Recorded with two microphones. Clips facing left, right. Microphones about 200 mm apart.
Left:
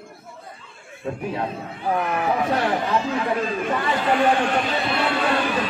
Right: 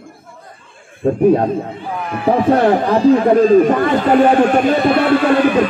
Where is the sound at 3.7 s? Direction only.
55° right (ahead or behind).